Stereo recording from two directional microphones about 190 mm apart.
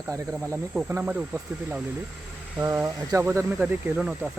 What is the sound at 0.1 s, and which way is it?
Speech, 15° right (ahead or behind).